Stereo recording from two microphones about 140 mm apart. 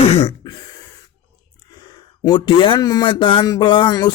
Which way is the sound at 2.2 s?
35° left (ahead or behind).